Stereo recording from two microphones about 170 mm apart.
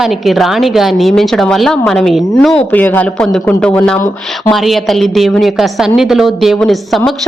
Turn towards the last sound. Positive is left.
turn(degrees=0)  # may be behind; listen again after turning